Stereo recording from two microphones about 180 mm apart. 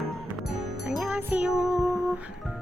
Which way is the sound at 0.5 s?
5° right (ahead or behind).